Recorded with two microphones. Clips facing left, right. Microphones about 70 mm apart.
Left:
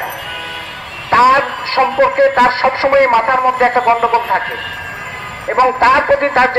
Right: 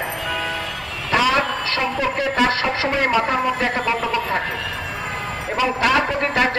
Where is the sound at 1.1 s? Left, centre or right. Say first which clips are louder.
Left 9 dB; left.